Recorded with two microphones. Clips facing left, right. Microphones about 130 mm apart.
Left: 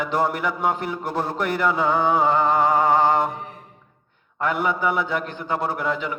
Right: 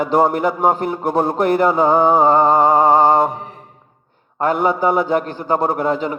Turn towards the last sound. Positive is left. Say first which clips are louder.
# right 6 dB
turn(degrees=-40)  # may be behind; listen again after turning